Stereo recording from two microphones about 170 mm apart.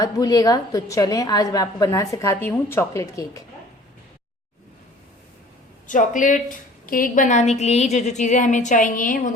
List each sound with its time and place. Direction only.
0.0 s a woman's voice: 20° left (ahead or behind)
5.9 s a woman's voice: 50° left (ahead or behind)